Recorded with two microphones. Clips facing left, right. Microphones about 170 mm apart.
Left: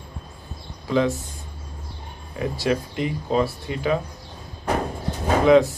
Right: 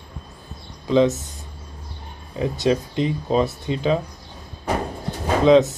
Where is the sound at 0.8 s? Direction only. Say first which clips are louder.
Right 4 dB; 20° right (ahead or behind).